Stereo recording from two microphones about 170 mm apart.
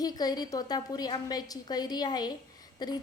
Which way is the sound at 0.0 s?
20° left (ahead or behind).